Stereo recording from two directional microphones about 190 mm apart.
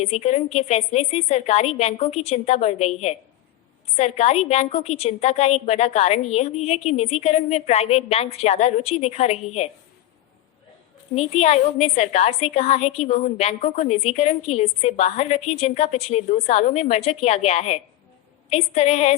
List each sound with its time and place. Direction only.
0.0 s a woman's voice: 35° left (ahead or behind)
11.1 s a woman's voice: 35° left (ahead or behind)